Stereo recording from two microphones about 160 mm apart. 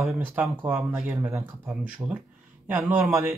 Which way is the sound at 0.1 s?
15° right (ahead or behind).